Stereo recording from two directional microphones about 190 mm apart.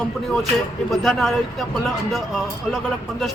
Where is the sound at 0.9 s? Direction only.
Centre (ahead or behind).